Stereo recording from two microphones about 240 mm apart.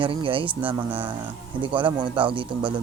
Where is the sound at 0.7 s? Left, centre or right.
Centre.